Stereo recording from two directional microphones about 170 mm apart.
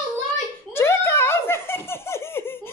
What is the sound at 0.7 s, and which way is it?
Giggle, 15° left (ahead or behind).